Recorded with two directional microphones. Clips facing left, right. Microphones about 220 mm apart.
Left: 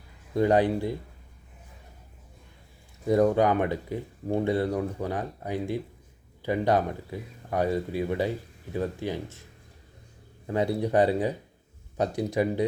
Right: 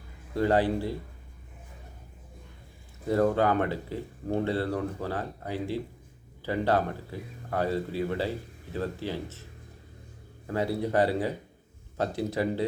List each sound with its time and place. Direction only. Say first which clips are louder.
0.3 s speech: left 2 dB; 15° left (ahead or behind)
3.1 s speech: left 3 dB; 15° left (ahead or behind)
10.4 s speech: left 2 dB; 20° left (ahead or behind)